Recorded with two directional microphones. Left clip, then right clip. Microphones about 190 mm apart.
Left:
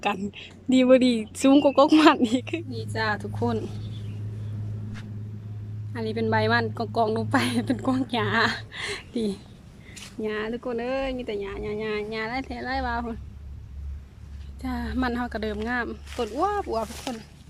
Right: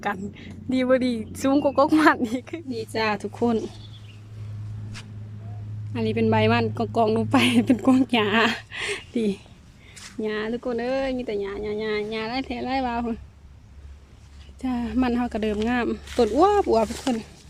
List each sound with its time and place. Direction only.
0.0 s speech: centre (ahead or behind)
2.6 s a woman's voice: 10° right (ahead or behind)
5.9 s a woman's voice: 5° right (ahead or behind)
14.6 s a woman's voice: 10° right (ahead or behind)